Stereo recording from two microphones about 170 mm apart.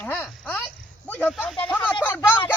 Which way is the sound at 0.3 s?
5° left (ahead or behind).